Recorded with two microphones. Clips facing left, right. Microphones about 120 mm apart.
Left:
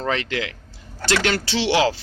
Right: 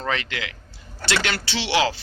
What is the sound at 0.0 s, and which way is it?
Speech, 35° left (ahead or behind).